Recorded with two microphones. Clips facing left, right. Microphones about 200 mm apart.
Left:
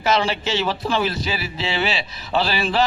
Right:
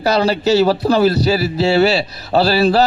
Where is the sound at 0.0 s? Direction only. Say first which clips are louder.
Right 6 dB; 40° right (ahead or behind).